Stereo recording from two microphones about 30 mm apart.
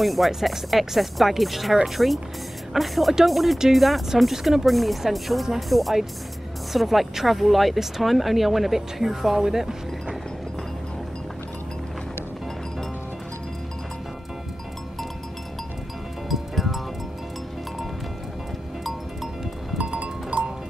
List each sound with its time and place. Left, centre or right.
0.0 s speech: centre
16.3 s music: centre
19.8 s music: right